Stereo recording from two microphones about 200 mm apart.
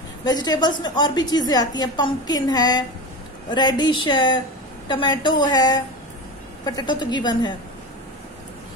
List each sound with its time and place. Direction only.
0.2 s a woman's voice: 20° left (ahead or behind)